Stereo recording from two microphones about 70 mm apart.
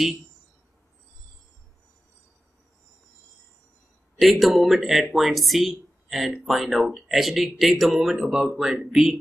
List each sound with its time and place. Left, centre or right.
4.2 s speech: centre